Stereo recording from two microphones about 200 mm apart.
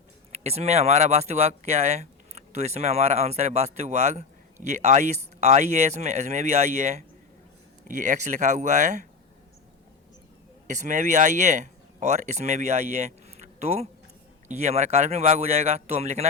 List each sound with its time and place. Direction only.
0.3 s speech: 30° right (ahead or behind)
10.7 s speech: 35° right (ahead or behind)